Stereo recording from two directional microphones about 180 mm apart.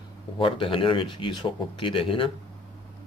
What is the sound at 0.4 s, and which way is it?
Speech, 30° left (ahead or behind).